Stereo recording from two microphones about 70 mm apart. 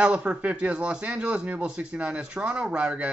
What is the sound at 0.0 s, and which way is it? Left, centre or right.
Speech, centre.